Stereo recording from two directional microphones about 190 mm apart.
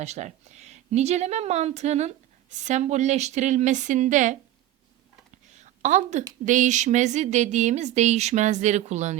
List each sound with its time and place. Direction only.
0.0 s speech: 35° right (ahead or behind)
5.5 s a sound: 40° right (ahead or behind)
6.4 s speech: 40° right (ahead or behind)